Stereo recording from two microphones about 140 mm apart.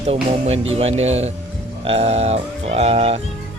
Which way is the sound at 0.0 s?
45° right (ahead or behind).